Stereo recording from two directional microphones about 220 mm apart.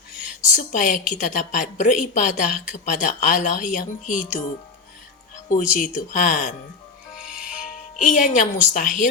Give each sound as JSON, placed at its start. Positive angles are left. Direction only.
{"t": 0.5, "sound": "a woman's voice", "side_deg": 35}
{"t": 5.5, "sound": "a woman's voice", "side_deg": 40}
{"t": 7.3, "sound": "music", "side_deg": -5}
{"t": 7.9, "sound": "a woman's voice", "side_deg": 35}